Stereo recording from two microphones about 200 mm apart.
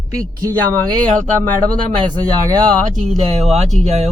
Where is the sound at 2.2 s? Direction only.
20° right (ahead or behind).